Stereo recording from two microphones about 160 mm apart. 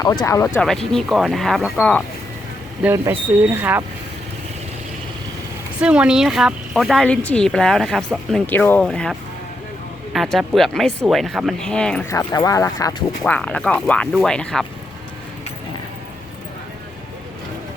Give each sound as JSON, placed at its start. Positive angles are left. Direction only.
{"t": 0.0, "sound": "speech", "side_deg": 20}
{"t": 0.6, "sound": "speech", "side_deg": 5}
{"t": 3.1, "sound": "speech", "side_deg": -10}
{"t": 5.8, "sound": "speech", "side_deg": -5}
{"t": 12.0, "sound": "speech", "side_deg": 20}
{"t": 13.2, "sound": "speech", "side_deg": 10}